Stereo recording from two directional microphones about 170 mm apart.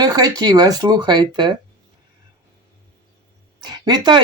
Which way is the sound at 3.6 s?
25° right (ahead or behind).